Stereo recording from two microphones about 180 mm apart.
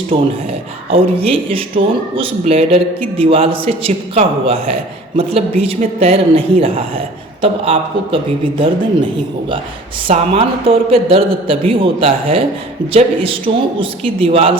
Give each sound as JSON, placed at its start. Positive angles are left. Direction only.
{"t": 0.1, "sound": "a man's voice", "side_deg": -30}
{"t": 10.1, "sound": "speech", "side_deg": -30}